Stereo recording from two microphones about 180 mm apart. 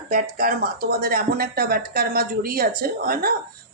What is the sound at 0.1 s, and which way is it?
Speech, 55° right (ahead or behind).